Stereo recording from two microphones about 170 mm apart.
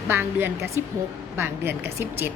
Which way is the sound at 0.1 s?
15° right (ahead or behind).